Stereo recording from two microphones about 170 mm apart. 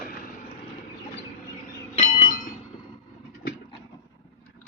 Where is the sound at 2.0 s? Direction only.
45° left (ahead or behind).